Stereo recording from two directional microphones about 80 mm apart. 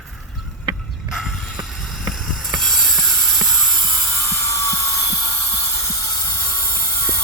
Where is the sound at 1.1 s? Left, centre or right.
Centre.